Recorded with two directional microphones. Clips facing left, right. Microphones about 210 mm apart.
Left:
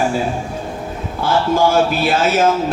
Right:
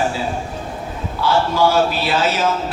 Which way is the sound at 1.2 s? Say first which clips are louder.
Left 1 dB; 50° left (ahead or behind).